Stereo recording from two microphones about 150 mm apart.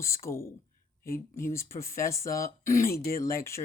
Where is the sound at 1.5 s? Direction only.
20° left (ahead or behind).